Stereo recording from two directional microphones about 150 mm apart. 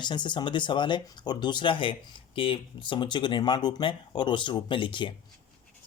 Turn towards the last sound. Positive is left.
turn(degrees=35)  # may be behind; listen again after turning